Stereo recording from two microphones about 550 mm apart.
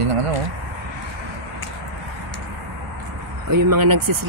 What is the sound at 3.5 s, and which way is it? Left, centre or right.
Speech, right.